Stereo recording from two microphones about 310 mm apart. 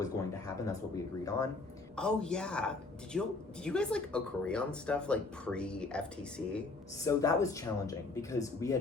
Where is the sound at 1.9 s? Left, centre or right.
Centre.